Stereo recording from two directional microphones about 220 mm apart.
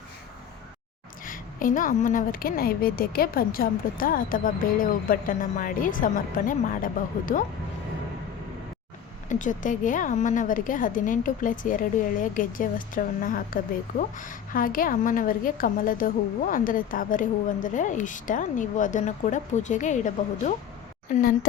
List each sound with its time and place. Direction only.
1.2 s a woman's voice: 40° left (ahead or behind)
9.3 s a woman's voice: 35° left (ahead or behind)